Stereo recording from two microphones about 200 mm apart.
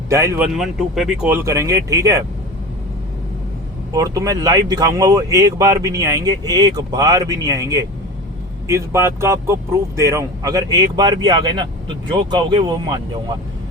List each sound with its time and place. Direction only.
0.1 s speech: 15° right (ahead or behind)
0.5 s speech: centre (ahead or behind)
3.9 s speech: 15° right (ahead or behind)